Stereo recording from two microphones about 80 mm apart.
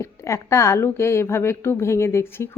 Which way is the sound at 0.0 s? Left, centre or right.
Left.